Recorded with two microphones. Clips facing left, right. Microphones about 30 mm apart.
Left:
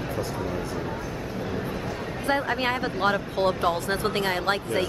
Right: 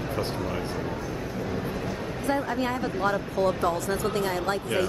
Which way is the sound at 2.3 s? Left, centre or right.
Left.